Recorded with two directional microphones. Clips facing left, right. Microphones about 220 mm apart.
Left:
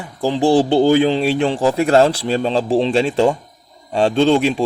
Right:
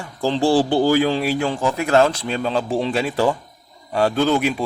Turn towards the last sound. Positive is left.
turn(degrees=30)  # may be behind; listen again after turning